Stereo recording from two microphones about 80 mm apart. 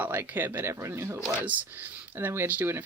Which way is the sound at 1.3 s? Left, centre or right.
Centre.